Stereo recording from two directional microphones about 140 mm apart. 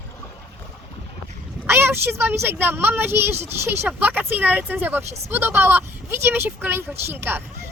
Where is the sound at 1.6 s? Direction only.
15° right (ahead or behind).